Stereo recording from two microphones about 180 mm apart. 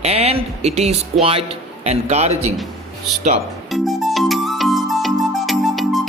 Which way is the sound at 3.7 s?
Centre (ahead or behind).